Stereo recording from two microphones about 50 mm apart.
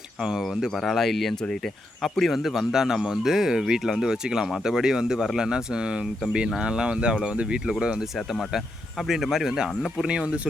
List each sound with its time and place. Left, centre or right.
0.2 s speech: centre
9.0 s speech: centre